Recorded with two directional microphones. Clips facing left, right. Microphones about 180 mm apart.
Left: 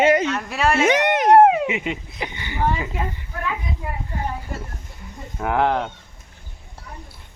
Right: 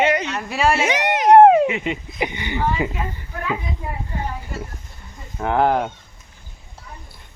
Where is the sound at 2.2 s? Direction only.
15° right (ahead or behind).